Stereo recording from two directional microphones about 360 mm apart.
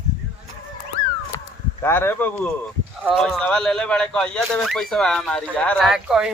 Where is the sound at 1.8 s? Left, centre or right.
Centre.